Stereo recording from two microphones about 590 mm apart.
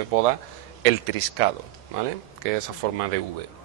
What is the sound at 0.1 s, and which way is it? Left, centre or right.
Speech, right.